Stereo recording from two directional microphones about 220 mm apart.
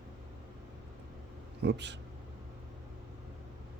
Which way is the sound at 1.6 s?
50° right (ahead or behind).